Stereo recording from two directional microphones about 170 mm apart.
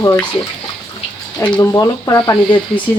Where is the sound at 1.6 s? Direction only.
20° left (ahead or behind).